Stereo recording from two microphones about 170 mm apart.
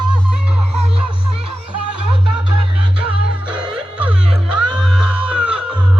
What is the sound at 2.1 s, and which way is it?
Music, 30° right (ahead or behind).